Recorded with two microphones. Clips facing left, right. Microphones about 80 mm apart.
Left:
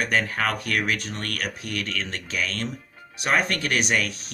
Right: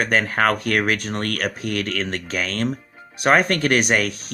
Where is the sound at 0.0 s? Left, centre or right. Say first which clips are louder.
Right 5 dB; right.